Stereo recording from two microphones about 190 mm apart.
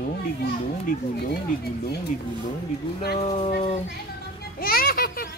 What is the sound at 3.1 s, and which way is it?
Speech, 35° left (ahead or behind).